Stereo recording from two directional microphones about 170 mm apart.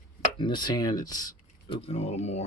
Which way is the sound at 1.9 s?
40° left (ahead or behind).